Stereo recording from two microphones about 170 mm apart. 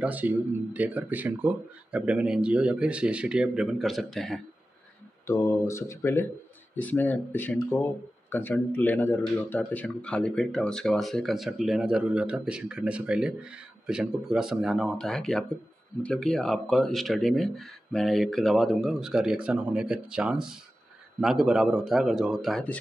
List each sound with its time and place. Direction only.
0.0 s speech: 10° right (ahead or behind)
5.2 s speech: 15° left (ahead or behind)